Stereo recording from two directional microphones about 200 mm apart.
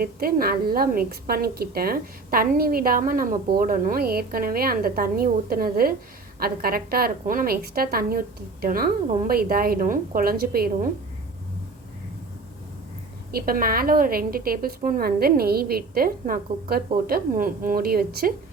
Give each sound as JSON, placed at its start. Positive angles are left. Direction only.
{"t": 0.0, "sound": "a woman's voice", "side_deg": -45}
{"t": 13.3, "sound": "a woman's voice", "side_deg": -45}